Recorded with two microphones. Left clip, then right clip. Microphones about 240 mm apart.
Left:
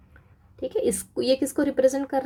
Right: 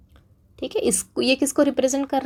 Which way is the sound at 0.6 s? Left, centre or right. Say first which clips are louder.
Right 2 dB; centre.